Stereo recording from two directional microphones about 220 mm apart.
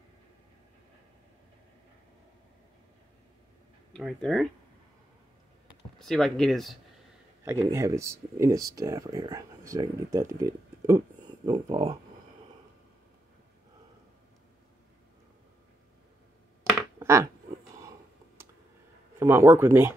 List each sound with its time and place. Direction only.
3.9 s speech: 5° left (ahead or behind)
5.9 s speech: centre (ahead or behind)
7.4 s speech: 10° right (ahead or behind)
11.4 s speech: 20° right (ahead or behind)
17.0 s a sound: 15° right (ahead or behind)
19.1 s speech: 10° right (ahead or behind)